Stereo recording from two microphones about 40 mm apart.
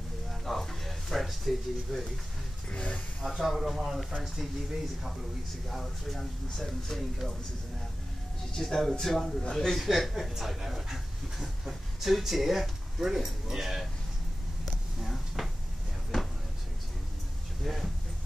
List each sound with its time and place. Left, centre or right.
0.3 s a sound: centre
2.7 s a man's voice: left
3.3 s speech: centre
5.7 s speech: centre
8.5 s speech: centre
9.4 s a man's voice: centre
9.7 s speech: centre
15.0 s a sound: centre
17.6 s speech: centre